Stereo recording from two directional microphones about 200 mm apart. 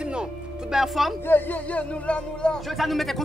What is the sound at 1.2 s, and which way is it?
Speech, 10° left (ahead or behind).